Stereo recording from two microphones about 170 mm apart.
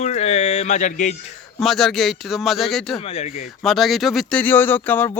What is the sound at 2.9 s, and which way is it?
Speech, 35° left (ahead or behind).